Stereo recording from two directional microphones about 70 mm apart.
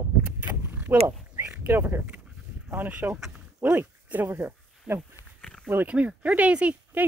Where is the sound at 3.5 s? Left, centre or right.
Centre.